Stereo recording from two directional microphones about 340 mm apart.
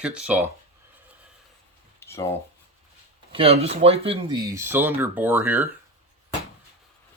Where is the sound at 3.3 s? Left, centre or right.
Centre.